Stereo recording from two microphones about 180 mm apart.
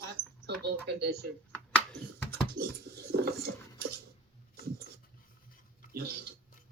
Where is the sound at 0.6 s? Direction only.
65° right (ahead or behind).